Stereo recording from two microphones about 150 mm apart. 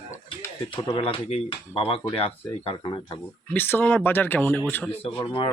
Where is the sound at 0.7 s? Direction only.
35° left (ahead or behind).